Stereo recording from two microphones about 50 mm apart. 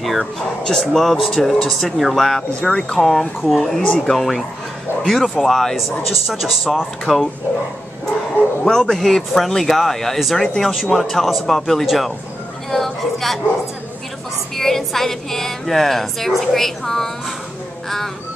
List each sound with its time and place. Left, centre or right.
0.7 s a woman's voice: centre
8.6 s a woman's voice: centre
14.6 s a woman's voice: centre